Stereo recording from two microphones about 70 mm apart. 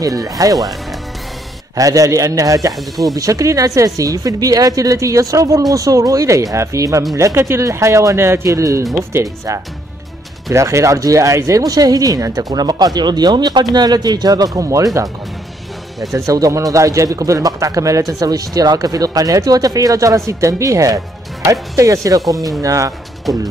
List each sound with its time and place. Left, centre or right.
0.0 s a man's voice: right
1.8 s speech: right
2.7 s speech: centre
3.2 s a man's voice: right
16.3 s a man's voice: right